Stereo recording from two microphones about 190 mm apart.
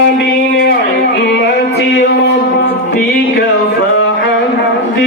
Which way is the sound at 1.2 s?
60° left (ahead or behind).